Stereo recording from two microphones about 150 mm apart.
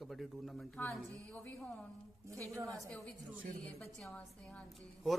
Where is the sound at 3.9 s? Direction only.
5° left (ahead or behind).